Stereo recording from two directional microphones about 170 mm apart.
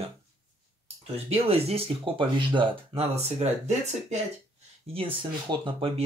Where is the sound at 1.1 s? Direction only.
35° right (ahead or behind).